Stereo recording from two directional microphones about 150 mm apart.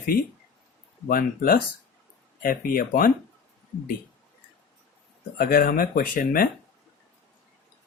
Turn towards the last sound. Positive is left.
turn(degrees=70)  # may be behind; listen again after turning